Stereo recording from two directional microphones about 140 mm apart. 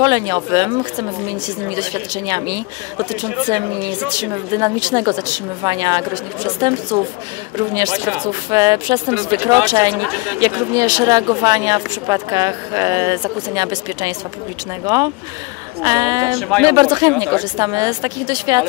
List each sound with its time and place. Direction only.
0.0 s speech: 25° right (ahead or behind)
7.9 s speech: 5° right (ahead or behind)
8.2 s speech: 30° right (ahead or behind)
15.8 s speech: 25° right (ahead or behind)
16.3 s speech: 5° left (ahead or behind)
16.6 s speech: 30° right (ahead or behind)